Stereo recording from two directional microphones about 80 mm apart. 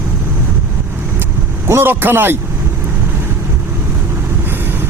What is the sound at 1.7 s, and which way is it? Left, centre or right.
Speech, right.